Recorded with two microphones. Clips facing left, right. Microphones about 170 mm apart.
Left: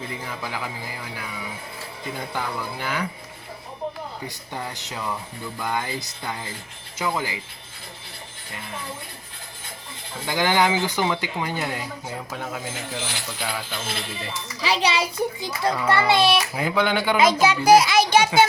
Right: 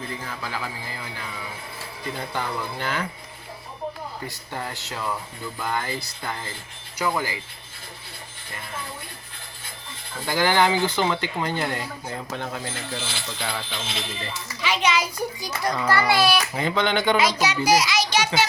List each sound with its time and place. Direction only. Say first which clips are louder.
0.3 s speech: left 1 dB; 15° left (ahead or behind)
4.3 s speech: even; 15° left (ahead or behind)
4.9 s speech: even; 5° left (ahead or behind)
5.6 s speech: left 1 dB; 15° left (ahead or behind)
10.2 s speech: even; 15° left (ahead or behind)
14.6 s a child's voice: left 1 dB; 35° left (ahead or behind)
16.6 s speech: left 1 dB; 5° left (ahead or behind)
17.2 s a child's voice: left 3 dB; 50° left (ahead or behind)